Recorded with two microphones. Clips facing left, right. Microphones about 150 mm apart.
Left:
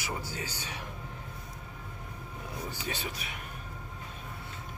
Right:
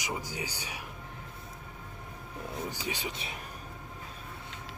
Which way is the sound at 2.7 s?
15° right (ahead or behind).